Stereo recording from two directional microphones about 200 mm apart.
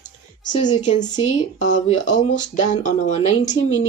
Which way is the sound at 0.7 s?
35° left (ahead or behind).